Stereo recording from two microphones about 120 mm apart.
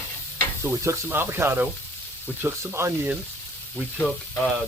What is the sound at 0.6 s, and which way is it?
Speech, 20° right (ahead or behind).